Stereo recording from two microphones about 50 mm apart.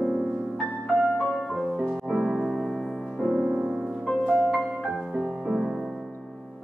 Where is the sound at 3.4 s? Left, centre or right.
Centre.